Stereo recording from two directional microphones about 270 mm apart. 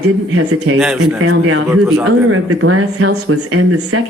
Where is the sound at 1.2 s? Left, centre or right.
Right.